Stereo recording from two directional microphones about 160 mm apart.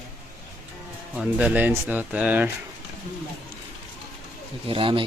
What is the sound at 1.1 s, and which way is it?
Speech, 10° right (ahead or behind).